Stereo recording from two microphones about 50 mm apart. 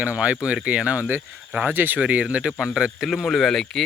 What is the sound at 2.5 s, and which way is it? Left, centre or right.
Speech, centre.